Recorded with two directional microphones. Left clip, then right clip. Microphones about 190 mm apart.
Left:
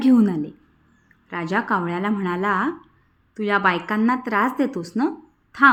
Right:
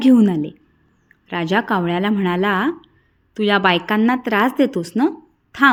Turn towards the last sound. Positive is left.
turn(degrees=-25)  # may be behind; listen again after turning